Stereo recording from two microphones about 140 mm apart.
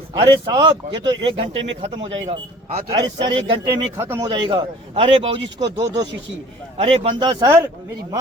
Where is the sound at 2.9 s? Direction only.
30° right (ahead or behind).